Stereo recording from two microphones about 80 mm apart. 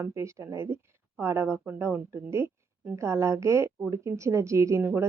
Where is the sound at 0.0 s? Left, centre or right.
Right.